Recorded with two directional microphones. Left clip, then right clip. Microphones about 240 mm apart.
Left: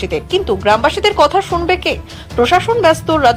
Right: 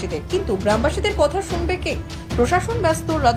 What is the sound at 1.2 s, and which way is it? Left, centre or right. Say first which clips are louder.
A woman's voice: left 8 dB; left.